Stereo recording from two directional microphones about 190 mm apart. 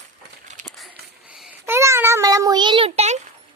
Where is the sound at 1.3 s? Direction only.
5° right (ahead or behind); by 3.2 s 35° right (ahead or behind).